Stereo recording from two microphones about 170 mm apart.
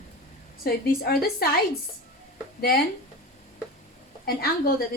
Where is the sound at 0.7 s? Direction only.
65° left (ahead or behind).